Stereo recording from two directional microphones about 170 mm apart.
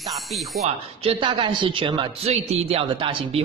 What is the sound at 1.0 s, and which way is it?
Speech, 30° right (ahead or behind).